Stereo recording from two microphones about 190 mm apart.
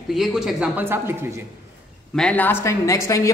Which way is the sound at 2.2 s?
5° left (ahead or behind).